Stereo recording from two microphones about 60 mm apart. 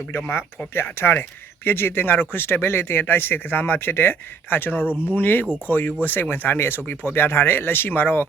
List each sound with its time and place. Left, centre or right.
0.3 s speech: left